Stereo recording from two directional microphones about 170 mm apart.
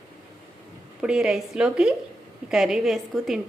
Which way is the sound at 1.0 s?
5° right (ahead or behind).